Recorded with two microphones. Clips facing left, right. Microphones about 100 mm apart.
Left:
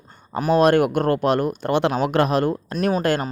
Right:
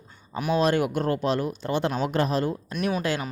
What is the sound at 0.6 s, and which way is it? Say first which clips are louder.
Speech: left 7 dB; 60° left (ahead or behind).